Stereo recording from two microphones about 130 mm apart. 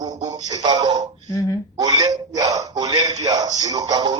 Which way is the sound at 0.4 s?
30° right (ahead or behind).